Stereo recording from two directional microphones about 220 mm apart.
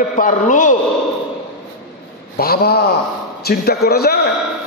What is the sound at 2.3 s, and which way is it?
A man's voice, 45° left (ahead or behind).